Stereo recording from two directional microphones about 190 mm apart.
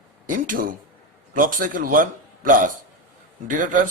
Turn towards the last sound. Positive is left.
turn(degrees=-45)  # may be behind; listen again after turning